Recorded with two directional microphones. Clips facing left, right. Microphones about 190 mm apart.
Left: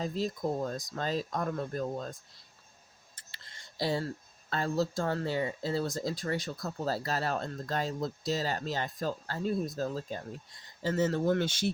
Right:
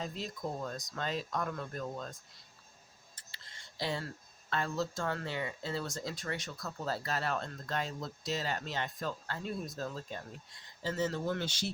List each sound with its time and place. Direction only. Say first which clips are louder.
0.0 s speech: left 7 dB; 40° left (ahead or behind)
3.8 s speech: left 6 dB; 35° left (ahead or behind)
10.8 s speech: left 6 dB; 50° left (ahead or behind)